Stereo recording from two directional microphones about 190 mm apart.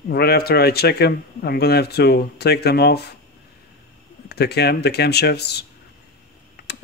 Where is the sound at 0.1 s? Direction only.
55° left (ahead or behind).